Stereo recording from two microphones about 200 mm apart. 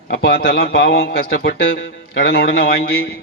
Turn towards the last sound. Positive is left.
turn(degrees=50)  # may be behind; listen again after turning